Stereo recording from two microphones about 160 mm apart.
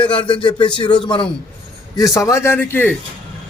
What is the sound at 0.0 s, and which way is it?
A man's voice, 30° left (ahead or behind).